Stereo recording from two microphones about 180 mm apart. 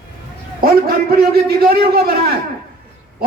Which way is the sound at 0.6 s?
55° right (ahead or behind).